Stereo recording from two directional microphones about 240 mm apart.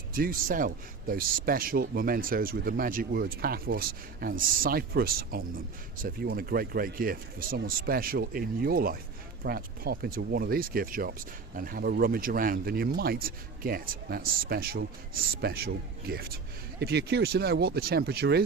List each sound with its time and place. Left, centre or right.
0.1 s speech: right